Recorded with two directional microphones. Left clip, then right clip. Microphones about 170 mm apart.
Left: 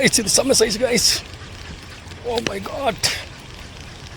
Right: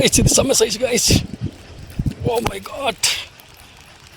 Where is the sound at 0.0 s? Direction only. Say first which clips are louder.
Right 2 dB; 55° right (ahead or behind).